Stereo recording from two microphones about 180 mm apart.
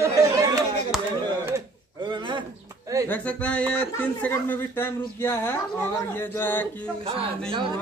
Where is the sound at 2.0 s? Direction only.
25° right (ahead or behind).